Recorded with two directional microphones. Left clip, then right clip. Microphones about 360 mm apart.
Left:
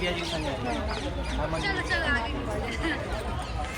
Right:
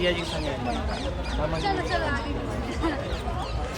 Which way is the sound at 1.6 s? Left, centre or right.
Centre.